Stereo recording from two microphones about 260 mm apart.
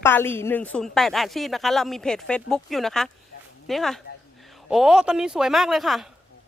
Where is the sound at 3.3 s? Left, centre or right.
Left.